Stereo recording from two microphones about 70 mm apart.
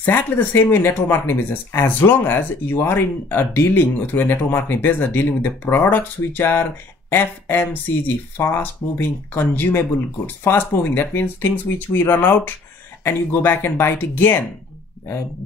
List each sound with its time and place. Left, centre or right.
0.0 s speech: left